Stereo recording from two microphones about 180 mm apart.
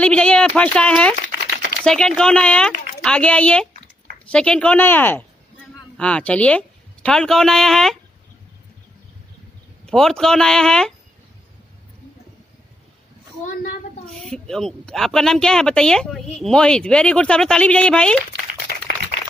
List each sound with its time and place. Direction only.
0.0 s speech: 5° left (ahead or behind)
9.8 s speech: centre (ahead or behind)
13.4 s a sound: 45° left (ahead or behind)
14.0 s speech: centre (ahead or behind)